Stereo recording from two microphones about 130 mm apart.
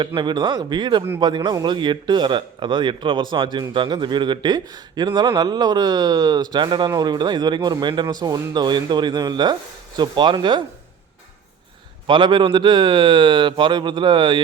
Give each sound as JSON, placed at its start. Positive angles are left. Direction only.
{"t": 0.0, "sound": "speech", "side_deg": -40}
{"t": 12.0, "sound": "speech", "side_deg": -35}